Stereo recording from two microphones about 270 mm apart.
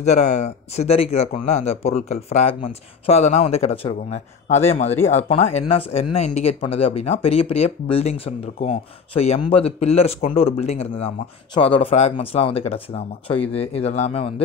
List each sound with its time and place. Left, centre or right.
0.0 s speech: left